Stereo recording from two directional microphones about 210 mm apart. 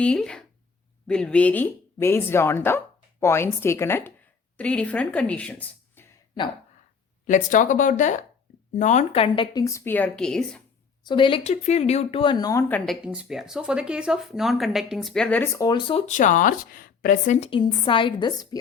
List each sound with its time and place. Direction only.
0.0 s speech: 5° left (ahead or behind)
7.3 s a woman's voice: 40° left (ahead or behind); by 10.6 s 5° left (ahead or behind)
11.0 s speech: 20° left (ahead or behind)